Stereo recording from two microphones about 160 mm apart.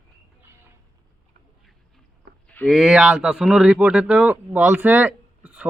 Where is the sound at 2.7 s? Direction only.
5° right (ahead or behind).